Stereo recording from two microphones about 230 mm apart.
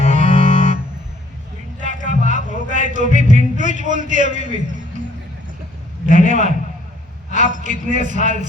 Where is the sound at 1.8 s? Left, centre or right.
Right.